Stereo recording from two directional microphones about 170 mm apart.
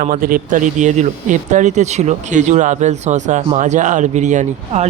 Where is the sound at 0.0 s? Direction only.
55° right (ahead or behind).